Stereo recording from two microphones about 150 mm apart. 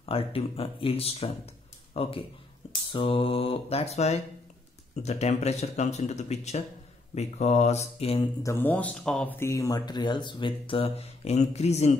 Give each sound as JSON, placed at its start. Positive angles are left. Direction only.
{"t": 0.0, "sound": "speech", "side_deg": 40}
{"t": 8.4, "sound": "speech", "side_deg": 15}
{"t": 9.5, "sound": "speech", "side_deg": 25}